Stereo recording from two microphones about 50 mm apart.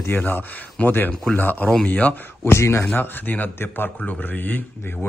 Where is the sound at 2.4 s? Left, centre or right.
Left.